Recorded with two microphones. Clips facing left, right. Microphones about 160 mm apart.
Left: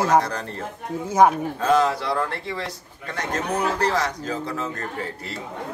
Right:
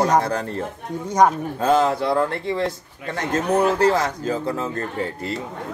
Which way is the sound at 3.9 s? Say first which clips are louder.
Right 3 dB; 25° right (ahead or behind).